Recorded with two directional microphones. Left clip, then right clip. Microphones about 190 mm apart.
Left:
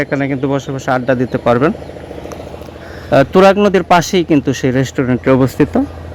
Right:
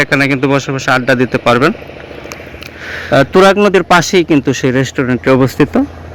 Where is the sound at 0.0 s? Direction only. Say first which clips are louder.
Right 5 dB; 5° right (ahead or behind).